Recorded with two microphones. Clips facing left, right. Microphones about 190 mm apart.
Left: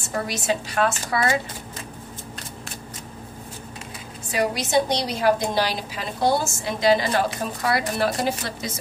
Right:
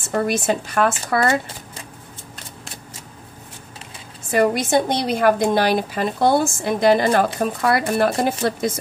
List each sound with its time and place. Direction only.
0.0 s a woman's voice: 50° right (ahead or behind)
4.3 s a woman's voice: 50° right (ahead or behind)